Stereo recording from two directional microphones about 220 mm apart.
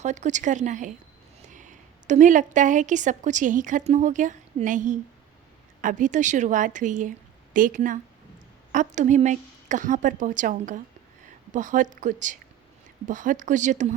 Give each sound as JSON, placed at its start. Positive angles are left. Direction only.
{"t": 0.0, "sound": "a woman's voice", "side_deg": -30}